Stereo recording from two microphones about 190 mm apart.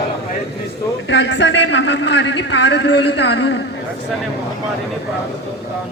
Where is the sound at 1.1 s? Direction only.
65° left (ahead or behind).